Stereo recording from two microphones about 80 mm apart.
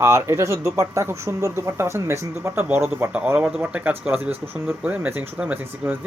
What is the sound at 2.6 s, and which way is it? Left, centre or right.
Speech, right.